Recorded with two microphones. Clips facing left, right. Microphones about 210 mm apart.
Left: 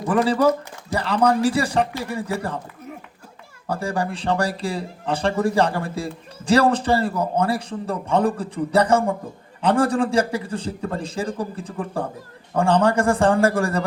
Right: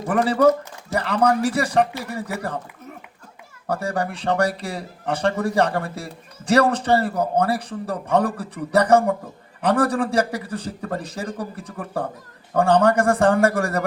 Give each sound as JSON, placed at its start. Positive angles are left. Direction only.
{"t": 0.9, "sound": "speech", "side_deg": 35}
{"t": 3.7, "sound": "a man's voice", "side_deg": 30}
{"t": 10.1, "sound": "a man's voice", "side_deg": -35}
{"t": 10.4, "sound": "a man's voice", "side_deg": 30}